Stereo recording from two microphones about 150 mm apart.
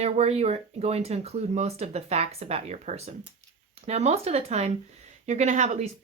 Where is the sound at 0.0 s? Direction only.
45° right (ahead or behind).